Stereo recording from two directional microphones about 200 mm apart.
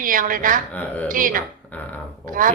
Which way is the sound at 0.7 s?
10° left (ahead or behind).